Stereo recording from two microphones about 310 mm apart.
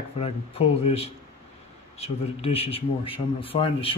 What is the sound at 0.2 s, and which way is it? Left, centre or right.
A man's voice, centre.